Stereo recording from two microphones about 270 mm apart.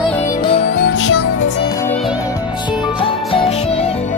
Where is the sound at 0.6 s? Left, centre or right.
Left.